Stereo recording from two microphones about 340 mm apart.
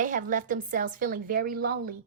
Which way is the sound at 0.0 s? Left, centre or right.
Right.